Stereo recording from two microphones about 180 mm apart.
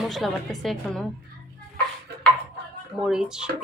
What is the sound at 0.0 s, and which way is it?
Speech, centre (ahead or behind).